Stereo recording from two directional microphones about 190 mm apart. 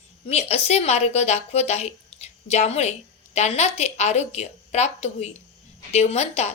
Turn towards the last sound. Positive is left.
turn(degrees=35)  # may be behind; listen again after turning